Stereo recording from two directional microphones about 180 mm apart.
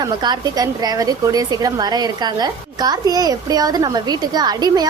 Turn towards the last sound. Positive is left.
turn(degrees=-20)  # may be behind; listen again after turning